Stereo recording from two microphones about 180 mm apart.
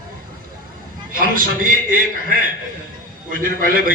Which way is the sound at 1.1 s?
50° right (ahead or behind).